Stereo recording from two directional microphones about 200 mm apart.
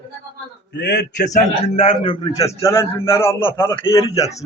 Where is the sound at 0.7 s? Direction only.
60° left (ahead or behind).